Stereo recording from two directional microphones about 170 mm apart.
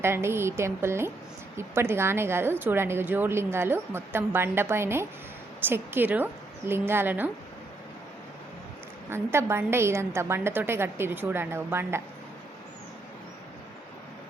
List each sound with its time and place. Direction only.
0.0 s speech: 15° right (ahead or behind)
9.0 s speech: 15° right (ahead or behind)